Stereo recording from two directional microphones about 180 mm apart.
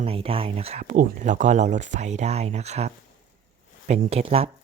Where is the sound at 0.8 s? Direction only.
50° right (ahead or behind).